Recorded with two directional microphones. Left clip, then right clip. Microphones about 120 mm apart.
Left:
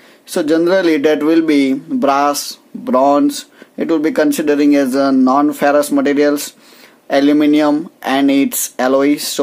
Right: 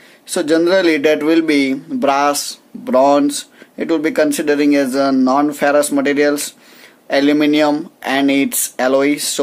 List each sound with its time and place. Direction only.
0.3 s speech: 30° left (ahead or behind)